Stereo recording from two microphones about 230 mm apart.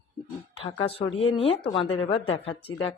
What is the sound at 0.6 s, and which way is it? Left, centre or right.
Speech, left.